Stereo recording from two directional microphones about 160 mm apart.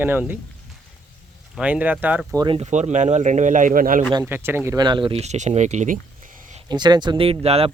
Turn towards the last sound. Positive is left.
turn(degrees=-40)  # may be behind; listen again after turning